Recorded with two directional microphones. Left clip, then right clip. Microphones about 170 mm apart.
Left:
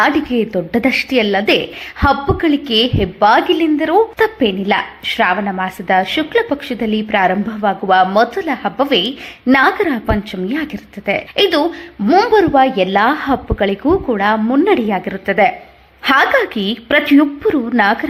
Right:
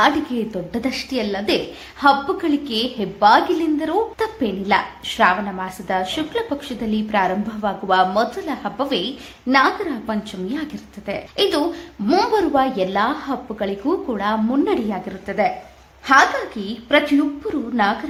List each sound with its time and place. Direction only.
0.0 s a woman's voice: 30° left (ahead or behind)
9.5 s a woman's voice: 40° left (ahead or behind)
12.0 s a woman's voice: 20° left (ahead or behind); by 15.5 s 40° left (ahead or behind)
16.6 s a woman's voice: 40° left (ahead or behind)